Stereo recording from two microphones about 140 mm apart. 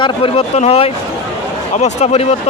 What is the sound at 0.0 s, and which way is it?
A man's voice, 45° left (ahead or behind).